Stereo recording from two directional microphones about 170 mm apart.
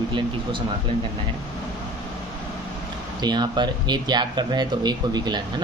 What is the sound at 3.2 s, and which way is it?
Speech, 25° right (ahead or behind).